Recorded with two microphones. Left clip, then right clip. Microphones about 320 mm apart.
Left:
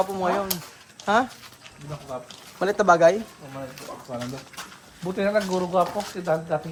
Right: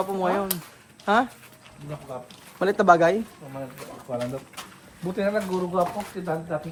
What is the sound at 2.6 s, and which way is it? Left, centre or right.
Speech, centre.